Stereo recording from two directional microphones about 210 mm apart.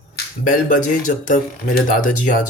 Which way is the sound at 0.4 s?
40° left (ahead or behind).